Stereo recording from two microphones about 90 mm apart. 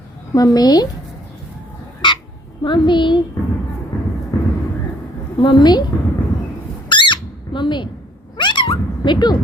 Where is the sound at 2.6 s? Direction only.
65° left (ahead or behind).